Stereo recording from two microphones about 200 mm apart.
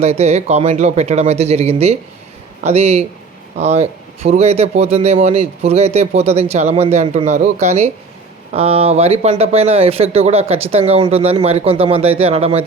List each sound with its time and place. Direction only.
0.0 s a man's voice: 30° right (ahead or behind)